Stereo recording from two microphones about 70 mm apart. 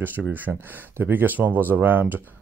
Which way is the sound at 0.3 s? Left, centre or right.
Right.